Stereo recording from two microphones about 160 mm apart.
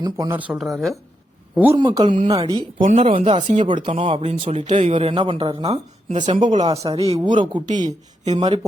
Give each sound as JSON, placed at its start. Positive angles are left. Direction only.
{"t": 0.0, "sound": "speech", "side_deg": -20}
{"t": 0.3, "sound": "speech", "side_deg": -5}
{"t": 1.5, "sound": "speech", "side_deg": -10}
{"t": 1.8, "sound": "speech", "side_deg": -25}
{"t": 2.8, "sound": "speech", "side_deg": -50}
{"t": 3.1, "sound": "speech", "side_deg": -35}
{"t": 3.4, "sound": "speech", "side_deg": -45}
{"t": 3.8, "sound": "speech", "side_deg": -35}
{"t": 4.4, "sound": "speech", "side_deg": -45}
{"t": 7.9, "sound": "speech", "side_deg": -45}